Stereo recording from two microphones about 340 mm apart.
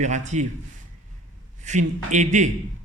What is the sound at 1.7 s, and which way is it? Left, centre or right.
Speech, right.